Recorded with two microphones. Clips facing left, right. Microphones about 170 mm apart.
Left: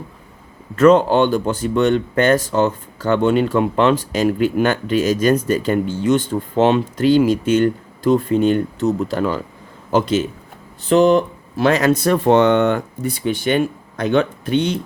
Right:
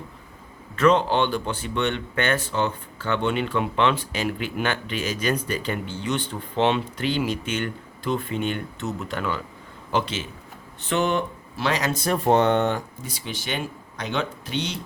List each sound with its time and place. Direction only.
0.8 s speech: 45° left (ahead or behind)
11.6 s speech: 50° left (ahead or behind)
12.0 s speech: 85° left; by 14.8 s 55° left (ahead or behind)